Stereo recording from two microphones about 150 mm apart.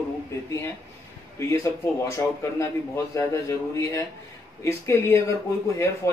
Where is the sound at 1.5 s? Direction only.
20° left (ahead or behind).